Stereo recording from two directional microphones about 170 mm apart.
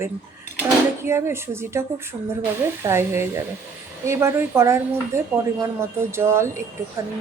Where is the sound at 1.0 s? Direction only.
15° right (ahead or behind).